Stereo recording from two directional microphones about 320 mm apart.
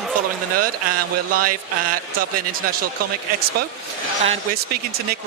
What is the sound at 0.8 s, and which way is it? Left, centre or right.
Speech, right.